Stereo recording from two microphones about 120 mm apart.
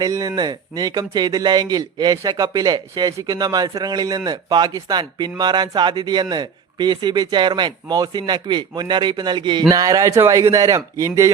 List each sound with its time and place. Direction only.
0.0 s a man's voice: 30° right (ahead or behind)